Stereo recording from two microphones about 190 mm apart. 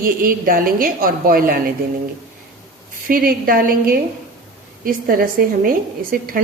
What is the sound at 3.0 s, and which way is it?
A woman's voice, 50° right (ahead or behind).